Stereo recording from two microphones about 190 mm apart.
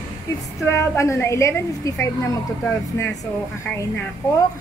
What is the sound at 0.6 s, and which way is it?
A woman's voice, 15° left (ahead or behind).